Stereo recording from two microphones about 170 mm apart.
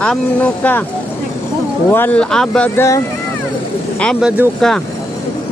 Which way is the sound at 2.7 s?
15° left (ahead or behind).